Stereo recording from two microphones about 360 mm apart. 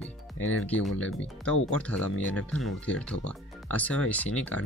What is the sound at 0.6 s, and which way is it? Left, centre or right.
Speech, centre.